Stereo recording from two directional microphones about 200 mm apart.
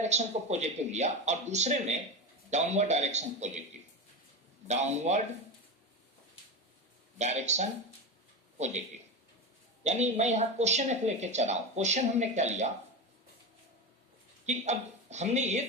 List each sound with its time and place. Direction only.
0.0 s speech: 35° right (ahead or behind)
4.7 s speech: 35° right (ahead or behind)
7.2 s speech: 35° right (ahead or behind)
9.8 s speech: 35° right (ahead or behind)
14.4 s speech: 35° right (ahead or behind)